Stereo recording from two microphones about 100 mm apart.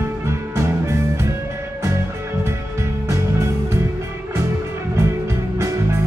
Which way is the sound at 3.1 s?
25° right (ahead or behind).